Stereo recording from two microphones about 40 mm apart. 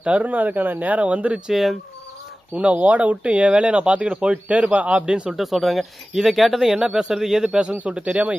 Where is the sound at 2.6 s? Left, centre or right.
Right.